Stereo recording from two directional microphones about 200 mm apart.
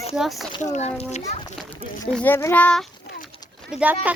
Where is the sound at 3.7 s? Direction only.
5° right (ahead or behind).